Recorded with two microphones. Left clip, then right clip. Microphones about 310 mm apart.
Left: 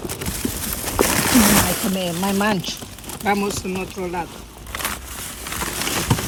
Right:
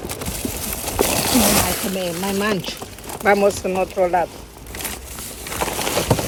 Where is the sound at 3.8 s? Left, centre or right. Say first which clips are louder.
Right 9 dB; right.